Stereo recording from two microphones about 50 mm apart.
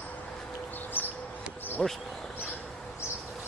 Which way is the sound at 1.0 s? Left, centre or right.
Left.